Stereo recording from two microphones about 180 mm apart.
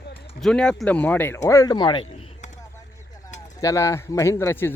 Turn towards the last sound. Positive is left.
turn(degrees=10)  # may be behind; listen again after turning